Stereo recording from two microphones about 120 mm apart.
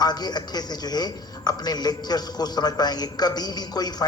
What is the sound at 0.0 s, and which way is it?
A man's voice, 35° left (ahead or behind).